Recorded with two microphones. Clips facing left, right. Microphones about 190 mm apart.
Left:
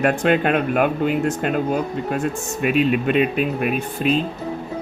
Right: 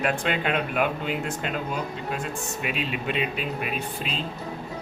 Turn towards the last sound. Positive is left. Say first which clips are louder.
# left 10 dB
turn(degrees=55)  # may be behind; listen again after turning